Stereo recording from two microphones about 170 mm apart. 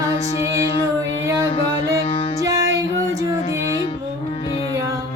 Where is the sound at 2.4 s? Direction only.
20° right (ahead or behind).